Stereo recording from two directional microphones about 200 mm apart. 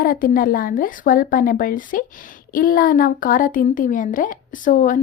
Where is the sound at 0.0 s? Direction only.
45° left (ahead or behind).